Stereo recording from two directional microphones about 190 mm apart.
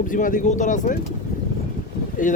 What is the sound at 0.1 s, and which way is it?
Speech, 45° left (ahead or behind).